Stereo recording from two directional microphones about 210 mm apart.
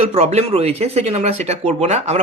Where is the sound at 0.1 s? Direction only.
30° right (ahead or behind).